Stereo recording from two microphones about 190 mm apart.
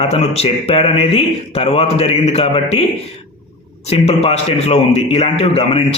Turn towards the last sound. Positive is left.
turn(degrees=30)  # may be behind; listen again after turning